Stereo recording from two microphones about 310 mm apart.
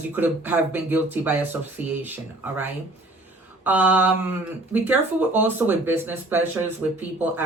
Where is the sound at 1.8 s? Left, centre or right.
Left.